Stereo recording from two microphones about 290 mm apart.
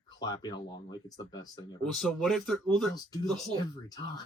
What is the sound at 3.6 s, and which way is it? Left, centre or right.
Speech, centre.